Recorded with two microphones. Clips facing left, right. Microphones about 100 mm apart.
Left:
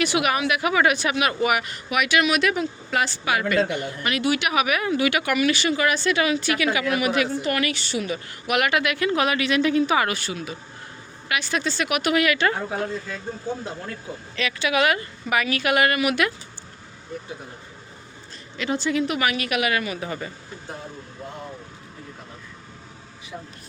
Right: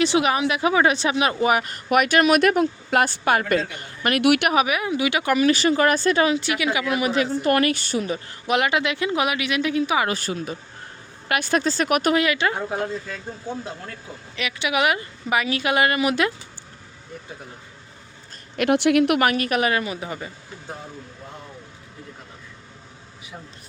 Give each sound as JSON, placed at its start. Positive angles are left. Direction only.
{"t": 0.0, "sound": "speech", "side_deg": -25}
{"t": 4.2, "sound": "a woman's voice", "side_deg": -65}
{"t": 4.5, "sound": "a woman's voice", "side_deg": -20}
{"t": 5.2, "sound": "speech", "side_deg": -30}
{"t": 6.3, "sound": "a woman's voice", "side_deg": -20}
{"t": 7.4, "sound": "a woman's voice", "side_deg": -45}
{"t": 10.1, "sound": "speech", "side_deg": -40}
{"t": 12.1, "sound": "a woman's voice", "side_deg": -25}
{"t": 12.4, "sound": "speech", "side_deg": -10}
{"t": 14.3, "sound": "a woman's voice", "side_deg": -15}
{"t": 18.5, "sound": "a woman's voice", "side_deg": -65}
{"t": 19.2, "sound": "speech", "side_deg": -45}